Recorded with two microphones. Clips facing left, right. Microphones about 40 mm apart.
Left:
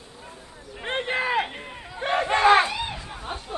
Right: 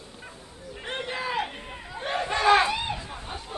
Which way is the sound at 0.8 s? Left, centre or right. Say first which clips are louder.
Left 6 dB; left.